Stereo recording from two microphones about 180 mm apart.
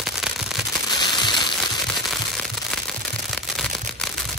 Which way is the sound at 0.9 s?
25° left (ahead or behind).